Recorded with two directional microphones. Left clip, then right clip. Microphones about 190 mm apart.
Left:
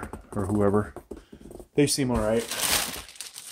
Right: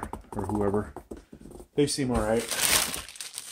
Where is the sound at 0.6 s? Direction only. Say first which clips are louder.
Left 5 dB; 50° left (ahead or behind).